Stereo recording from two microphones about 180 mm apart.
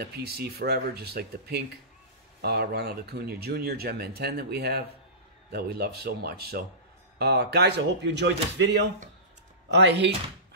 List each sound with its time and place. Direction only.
0.0 s speech: 65° right (ahead or behind)